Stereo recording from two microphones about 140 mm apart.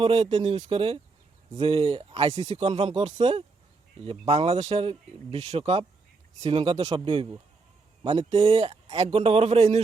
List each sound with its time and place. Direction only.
0.0 s speech: 40° right (ahead or behind)